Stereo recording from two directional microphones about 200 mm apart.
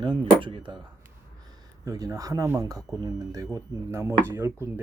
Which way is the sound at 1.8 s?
15° right (ahead or behind).